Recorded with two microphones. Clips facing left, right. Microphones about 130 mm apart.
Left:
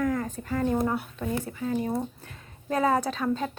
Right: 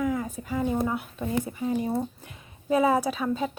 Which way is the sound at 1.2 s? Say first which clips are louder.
Right 2 dB; 20° right (ahead or behind).